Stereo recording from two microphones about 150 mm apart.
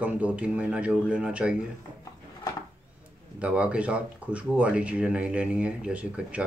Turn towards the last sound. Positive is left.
turn(degrees=-10)  # may be behind; listen again after turning